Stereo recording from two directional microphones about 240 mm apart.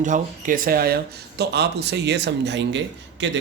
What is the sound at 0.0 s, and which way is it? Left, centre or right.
Speech, right.